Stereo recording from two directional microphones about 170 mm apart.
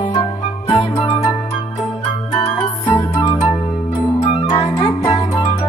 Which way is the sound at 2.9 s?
20° left (ahead or behind).